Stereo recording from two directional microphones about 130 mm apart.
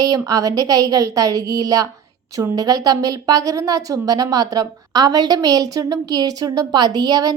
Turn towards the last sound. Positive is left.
turn(degrees=-30)  # may be behind; listen again after turning